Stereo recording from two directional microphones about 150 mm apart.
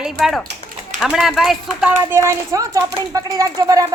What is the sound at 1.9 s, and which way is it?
A woman's voice, 15° right (ahead or behind).